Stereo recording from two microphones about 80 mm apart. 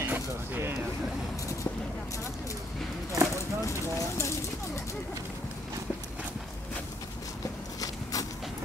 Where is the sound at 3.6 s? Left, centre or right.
Left.